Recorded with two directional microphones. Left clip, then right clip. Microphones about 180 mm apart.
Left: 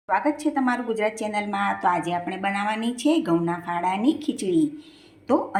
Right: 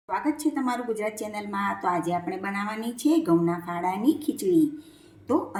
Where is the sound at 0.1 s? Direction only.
Centre (ahead or behind).